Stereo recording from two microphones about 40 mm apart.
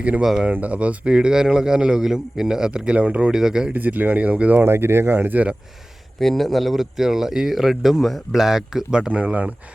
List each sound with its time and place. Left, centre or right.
0.6 s a man's voice: right
3.3 s speech: centre
3.7 s speech: right
4.6 s speech: right
6.1 s speech: centre
8.4 s speech: centre
9.2 s speech: right